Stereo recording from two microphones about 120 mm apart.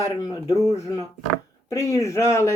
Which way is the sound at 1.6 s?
25° left (ahead or behind).